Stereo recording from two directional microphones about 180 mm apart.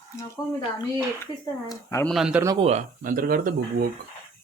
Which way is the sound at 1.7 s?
15° left (ahead or behind).